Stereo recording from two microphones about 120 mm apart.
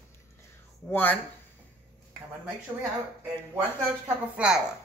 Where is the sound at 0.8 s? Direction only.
15° left (ahead or behind).